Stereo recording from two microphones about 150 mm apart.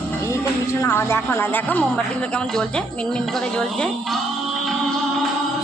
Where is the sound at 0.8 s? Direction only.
20° left (ahead or behind).